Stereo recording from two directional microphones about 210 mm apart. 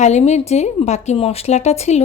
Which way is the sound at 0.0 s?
35° left (ahead or behind).